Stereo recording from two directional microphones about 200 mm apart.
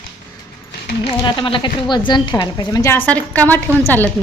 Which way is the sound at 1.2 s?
25° left (ahead or behind).